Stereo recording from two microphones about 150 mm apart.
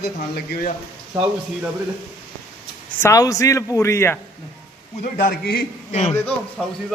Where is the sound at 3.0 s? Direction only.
20° left (ahead or behind).